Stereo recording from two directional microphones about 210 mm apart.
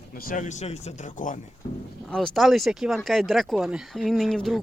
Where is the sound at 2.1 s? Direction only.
Centre (ahead or behind).